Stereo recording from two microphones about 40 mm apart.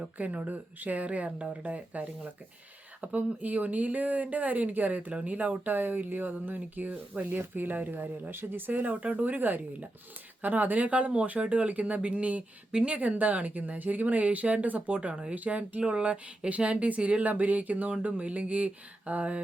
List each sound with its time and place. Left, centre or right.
0.2 s speech: right
13.0 s speech: right
17.2 s speech: right